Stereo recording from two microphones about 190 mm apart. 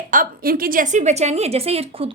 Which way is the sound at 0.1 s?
50° right (ahead or behind).